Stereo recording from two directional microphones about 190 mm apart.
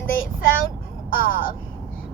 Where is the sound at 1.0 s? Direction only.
50° left (ahead or behind).